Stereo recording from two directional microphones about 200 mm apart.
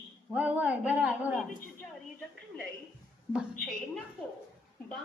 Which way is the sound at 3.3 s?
Centre (ahead or behind).